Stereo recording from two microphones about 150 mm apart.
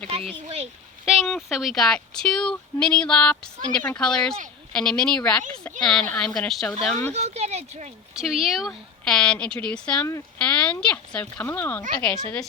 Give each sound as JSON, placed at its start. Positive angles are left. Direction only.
{"t": 0.1, "sound": "speech", "side_deg": -40}
{"t": 1.0, "sound": "speech", "side_deg": 0}
{"t": 7.1, "sound": "speech", "side_deg": -45}
{"t": 8.1, "sound": "speech", "side_deg": -5}